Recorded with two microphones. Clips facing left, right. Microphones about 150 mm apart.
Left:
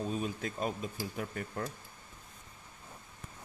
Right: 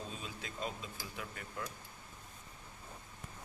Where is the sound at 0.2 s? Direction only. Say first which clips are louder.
Left 8 dB; 55° left (ahead or behind).